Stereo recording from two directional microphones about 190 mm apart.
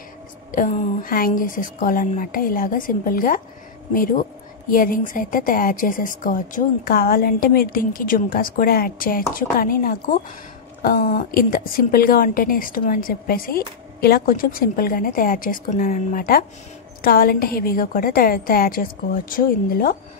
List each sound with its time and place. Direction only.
0.5 s speech: 45° left (ahead or behind)